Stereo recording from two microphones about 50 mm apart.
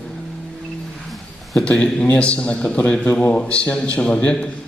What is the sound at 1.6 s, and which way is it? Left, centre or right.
A man's voice, left.